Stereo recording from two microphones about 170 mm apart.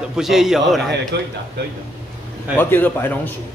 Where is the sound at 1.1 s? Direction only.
90° right.